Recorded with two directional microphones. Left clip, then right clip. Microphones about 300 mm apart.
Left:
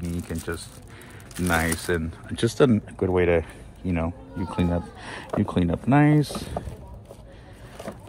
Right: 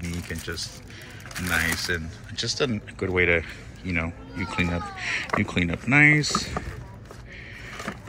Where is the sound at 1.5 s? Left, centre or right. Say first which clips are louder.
Even; centre.